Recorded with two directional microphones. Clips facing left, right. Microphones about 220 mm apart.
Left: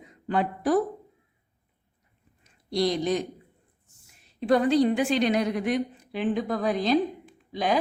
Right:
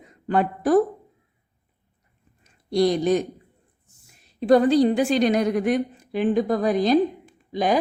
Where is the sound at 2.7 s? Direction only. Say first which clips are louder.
Right 5 dB; 50° right (ahead or behind).